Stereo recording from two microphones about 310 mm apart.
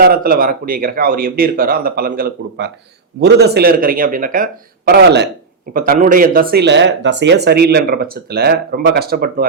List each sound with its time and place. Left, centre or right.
0.0 s speech: right